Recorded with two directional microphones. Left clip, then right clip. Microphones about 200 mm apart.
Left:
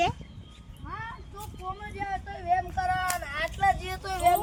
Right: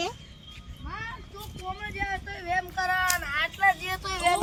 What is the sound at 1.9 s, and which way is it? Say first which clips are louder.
Child singing: right 1 dB; 35° left (ahead or behind).